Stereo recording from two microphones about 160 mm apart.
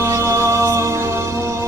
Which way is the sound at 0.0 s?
15° right (ahead or behind).